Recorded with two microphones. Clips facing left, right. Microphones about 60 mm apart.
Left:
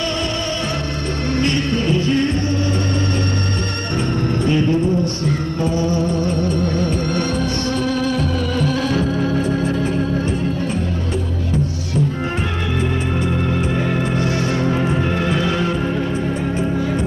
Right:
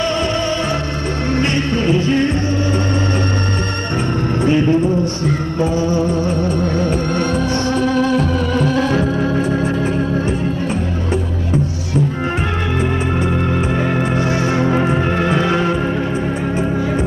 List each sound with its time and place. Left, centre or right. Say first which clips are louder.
0.0 s music: right 4 dB; centre
4.4 s music: right 4 dB; right
6.8 s music: right 2 dB; centre
13.9 s music: right 2 dB; right